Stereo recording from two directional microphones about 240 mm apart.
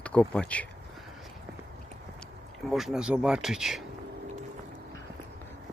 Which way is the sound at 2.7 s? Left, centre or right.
Centre.